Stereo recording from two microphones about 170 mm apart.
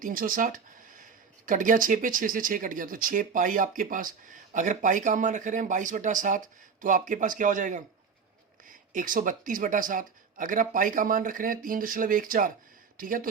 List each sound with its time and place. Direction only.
0.0 s speech: 55° right (ahead or behind)